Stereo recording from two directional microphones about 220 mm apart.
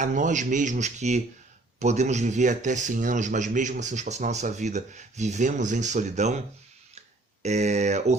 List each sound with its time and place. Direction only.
0.0 s speech: 35° right (ahead or behind)
7.4 s speech: 30° right (ahead or behind)